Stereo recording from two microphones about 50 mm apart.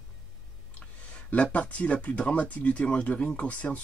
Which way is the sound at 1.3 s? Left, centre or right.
Left.